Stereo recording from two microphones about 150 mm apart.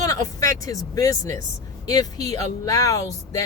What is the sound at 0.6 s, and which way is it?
Speech, 25° left (ahead or behind).